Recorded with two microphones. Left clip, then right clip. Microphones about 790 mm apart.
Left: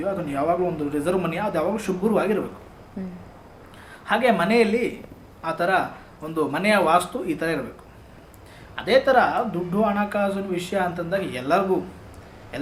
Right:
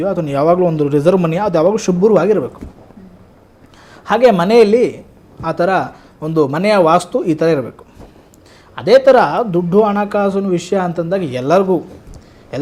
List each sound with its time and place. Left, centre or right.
0.0 s speech: right
4.0 s speech: right
8.7 s speech: right